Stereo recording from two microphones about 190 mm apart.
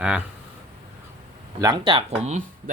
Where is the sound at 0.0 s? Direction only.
5° right (ahead or behind).